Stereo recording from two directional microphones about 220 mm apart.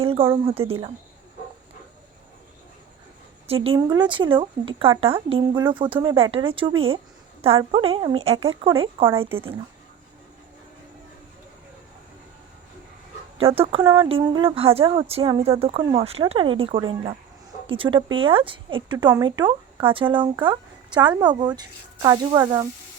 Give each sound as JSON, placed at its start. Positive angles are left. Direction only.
{"t": 0.0, "sound": "a woman's voice", "side_deg": -25}
{"t": 3.4, "sound": "speech", "side_deg": -25}
{"t": 13.4, "sound": "speech", "side_deg": -25}